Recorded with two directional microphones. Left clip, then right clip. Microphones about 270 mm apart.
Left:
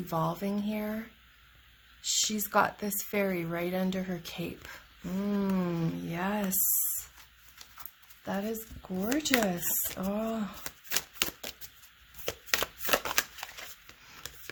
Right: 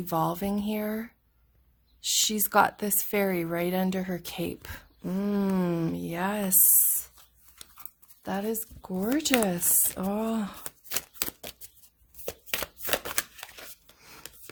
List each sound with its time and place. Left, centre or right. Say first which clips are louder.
0.1 s a woman's voice: right 4 dB; right
8.2 s a woman's voice: right 3 dB; right
10.7 s a sound: left 2 dB; centre
12.5 s chopping: left 2 dB; centre